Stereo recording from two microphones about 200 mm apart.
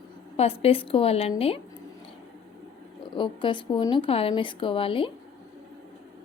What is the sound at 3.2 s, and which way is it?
Speech, 25° left (ahead or behind).